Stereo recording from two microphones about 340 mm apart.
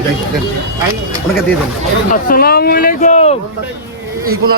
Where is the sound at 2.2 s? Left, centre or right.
Left.